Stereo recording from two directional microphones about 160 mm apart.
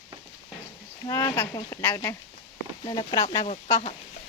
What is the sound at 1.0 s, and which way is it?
Speech, 20° left (ahead or behind).